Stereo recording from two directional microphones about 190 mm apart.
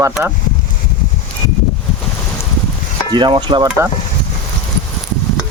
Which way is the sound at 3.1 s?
25° right (ahead or behind).